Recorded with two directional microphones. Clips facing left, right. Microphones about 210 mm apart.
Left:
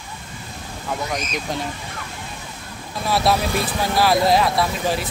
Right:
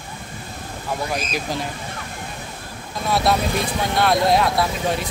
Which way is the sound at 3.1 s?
Centre (ahead or behind).